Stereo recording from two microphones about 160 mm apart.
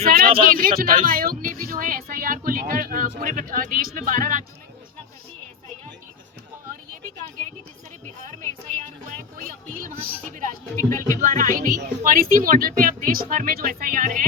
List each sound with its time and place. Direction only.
0.0 s speech: 65° right (ahead or behind)
6.7 s a sound: 60° right (ahead or behind)
8.2 s music: 50° right (ahead or behind)
10.8 s speech: 20° left (ahead or behind)
11.2 s speech: 50° right (ahead or behind)